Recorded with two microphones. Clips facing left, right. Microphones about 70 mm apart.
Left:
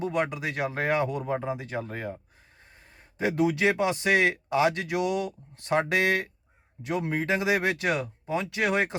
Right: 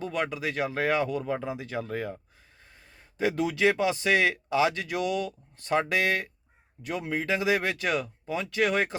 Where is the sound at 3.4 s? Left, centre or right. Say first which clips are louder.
Left 1 dB; left.